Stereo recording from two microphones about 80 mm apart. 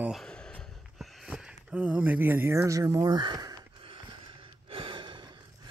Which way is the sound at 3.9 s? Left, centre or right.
Right.